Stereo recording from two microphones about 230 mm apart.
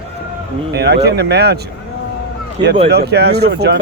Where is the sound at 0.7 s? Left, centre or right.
Right.